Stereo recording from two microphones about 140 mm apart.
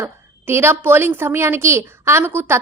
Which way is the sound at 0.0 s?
15° right (ahead or behind).